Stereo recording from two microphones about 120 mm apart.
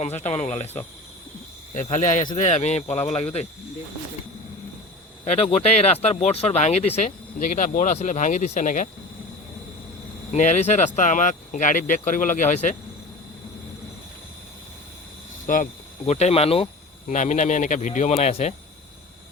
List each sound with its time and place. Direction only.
0.0 s speech: 70° left (ahead or behind)
1.7 s speech: 85° left; by 3.4 s 60° left (ahead or behind)
5.2 s speech: 60° left (ahead or behind)
7.5 s speech: 90° left
10.3 s speech: 75° left (ahead or behind)
15.5 s speech: 90° left
16.0 s speech: 65° left (ahead or behind)
17.1 s speech: 90° left; by 18.5 s 60° left (ahead or behind)